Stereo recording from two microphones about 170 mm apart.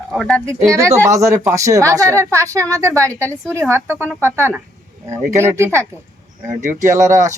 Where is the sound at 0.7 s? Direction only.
15° right (ahead or behind).